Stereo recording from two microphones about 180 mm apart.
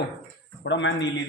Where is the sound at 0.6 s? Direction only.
85° left.